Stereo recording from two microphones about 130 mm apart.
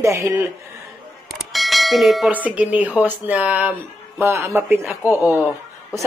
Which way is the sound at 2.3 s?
10° right (ahead or behind).